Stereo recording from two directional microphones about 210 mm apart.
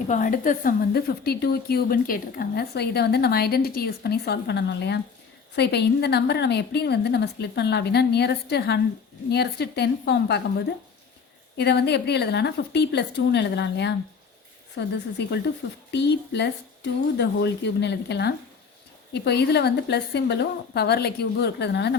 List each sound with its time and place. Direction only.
0.1 s a woman's voice: 40° left (ahead or behind)
11.5 s a woman's voice: 50° left (ahead or behind)